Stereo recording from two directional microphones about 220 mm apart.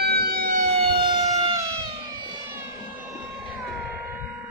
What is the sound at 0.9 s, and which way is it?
Emergency vehicle, 25° right (ahead or behind).